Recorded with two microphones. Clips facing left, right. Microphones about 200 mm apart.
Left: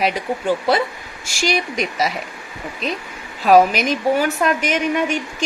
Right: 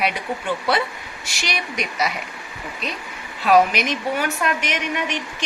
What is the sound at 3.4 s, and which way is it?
A woman's voice, 45° left (ahead or behind).